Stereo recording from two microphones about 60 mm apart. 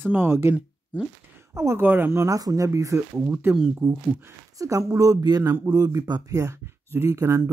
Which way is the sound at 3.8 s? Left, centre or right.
Right.